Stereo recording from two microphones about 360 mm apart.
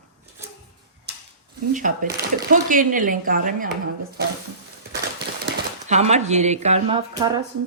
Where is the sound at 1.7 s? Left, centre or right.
Right.